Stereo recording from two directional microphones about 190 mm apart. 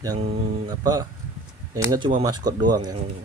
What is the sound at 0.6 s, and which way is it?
Speech, 20° right (ahead or behind).